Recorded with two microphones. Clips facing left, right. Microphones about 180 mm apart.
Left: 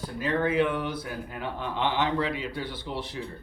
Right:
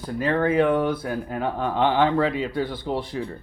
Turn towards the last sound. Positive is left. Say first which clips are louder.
# right 8 dB
turn(degrees=-45)  # may be behind; listen again after turning